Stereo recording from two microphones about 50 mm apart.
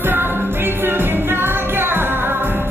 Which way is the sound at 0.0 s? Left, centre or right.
Right.